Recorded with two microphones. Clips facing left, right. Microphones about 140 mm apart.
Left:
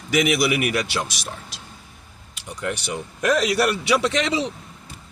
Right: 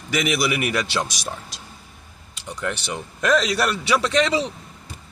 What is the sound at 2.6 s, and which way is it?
Speech, 10° left (ahead or behind).